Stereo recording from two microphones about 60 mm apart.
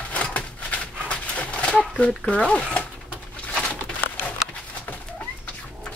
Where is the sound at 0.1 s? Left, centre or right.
Left.